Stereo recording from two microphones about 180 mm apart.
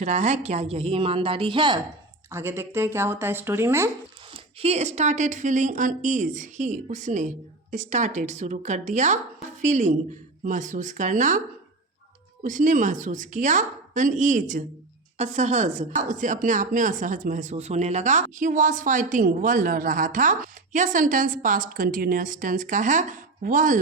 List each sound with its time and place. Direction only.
0.0 s a woman's voice: 40° right (ahead or behind)
2.3 s speech: 15° right (ahead or behind)
4.4 s speech: 35° right (ahead or behind)